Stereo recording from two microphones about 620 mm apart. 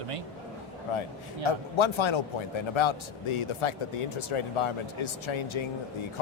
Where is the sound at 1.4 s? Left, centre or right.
Left.